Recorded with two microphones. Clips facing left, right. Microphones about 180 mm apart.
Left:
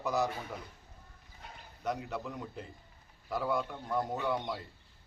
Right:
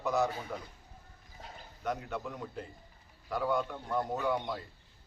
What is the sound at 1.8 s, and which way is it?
A man's voice, centre (ahead or behind).